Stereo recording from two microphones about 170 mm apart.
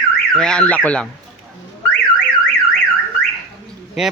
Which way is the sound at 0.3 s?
5° left (ahead or behind).